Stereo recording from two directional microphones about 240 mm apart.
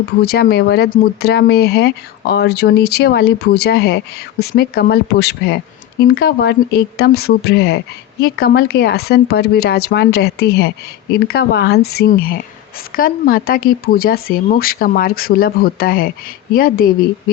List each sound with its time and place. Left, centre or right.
0.2 s speech: left